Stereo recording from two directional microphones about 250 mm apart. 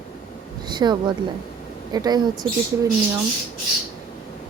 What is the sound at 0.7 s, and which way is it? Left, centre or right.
Speech, centre.